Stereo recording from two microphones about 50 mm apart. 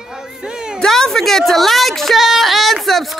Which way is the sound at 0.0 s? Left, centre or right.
Centre.